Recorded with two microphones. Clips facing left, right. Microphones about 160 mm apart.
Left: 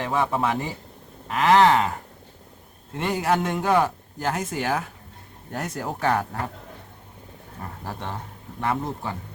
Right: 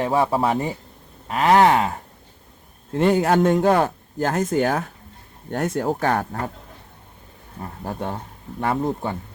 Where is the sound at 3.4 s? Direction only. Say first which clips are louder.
Right 5 dB; 40° right (ahead or behind).